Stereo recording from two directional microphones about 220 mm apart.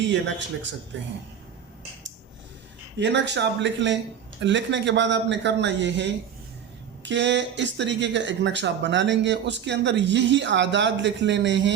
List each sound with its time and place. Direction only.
0.1 s speech: 55° right (ahead or behind)
3.0 s speech: 55° right (ahead or behind)